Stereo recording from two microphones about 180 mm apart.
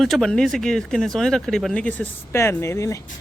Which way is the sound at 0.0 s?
Centre (ahead or behind).